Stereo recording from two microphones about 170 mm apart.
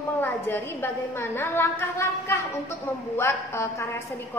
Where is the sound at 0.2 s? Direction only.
10° left (ahead or behind).